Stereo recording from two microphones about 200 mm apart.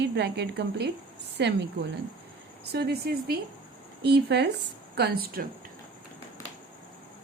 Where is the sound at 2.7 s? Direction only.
50° right (ahead or behind).